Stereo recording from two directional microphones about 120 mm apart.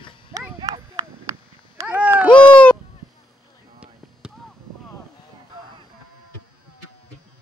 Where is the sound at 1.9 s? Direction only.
10° right (ahead or behind).